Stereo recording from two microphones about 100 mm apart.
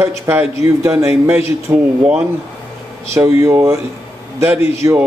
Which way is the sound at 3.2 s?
30° right (ahead or behind).